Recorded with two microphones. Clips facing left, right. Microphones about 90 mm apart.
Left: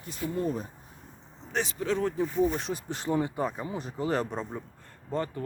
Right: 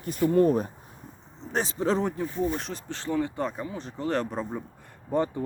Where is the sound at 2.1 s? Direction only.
5° left (ahead or behind).